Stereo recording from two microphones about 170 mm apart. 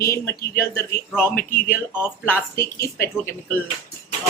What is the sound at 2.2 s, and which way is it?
Speech, 15° left (ahead or behind).